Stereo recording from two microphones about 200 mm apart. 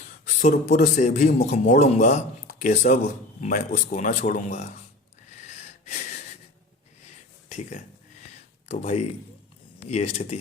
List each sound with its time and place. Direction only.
0.3 s a man's voice: 40° left (ahead or behind)
5.5 s wheeze: 35° left (ahead or behind)
8.6 s a man's voice: 30° left (ahead or behind)